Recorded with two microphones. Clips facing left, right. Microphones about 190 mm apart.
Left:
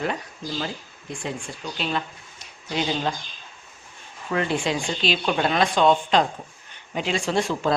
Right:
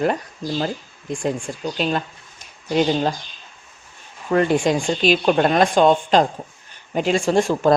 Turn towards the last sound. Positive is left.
turn(degrees=-45)  # may be behind; listen again after turning